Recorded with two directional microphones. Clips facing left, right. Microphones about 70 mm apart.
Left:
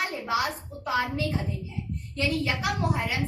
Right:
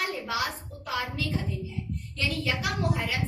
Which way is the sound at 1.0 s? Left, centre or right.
Left.